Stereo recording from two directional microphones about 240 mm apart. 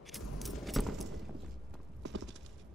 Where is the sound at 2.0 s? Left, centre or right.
Right.